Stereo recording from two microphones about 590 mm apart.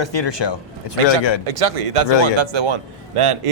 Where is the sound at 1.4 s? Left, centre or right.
Right.